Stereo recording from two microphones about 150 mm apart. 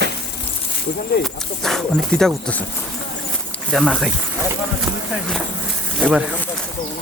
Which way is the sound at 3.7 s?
Centre (ahead or behind).